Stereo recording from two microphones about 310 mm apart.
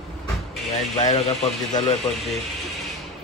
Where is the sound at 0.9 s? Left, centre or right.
Centre.